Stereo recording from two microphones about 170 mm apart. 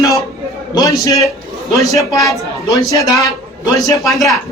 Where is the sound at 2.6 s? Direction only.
20° left (ahead or behind).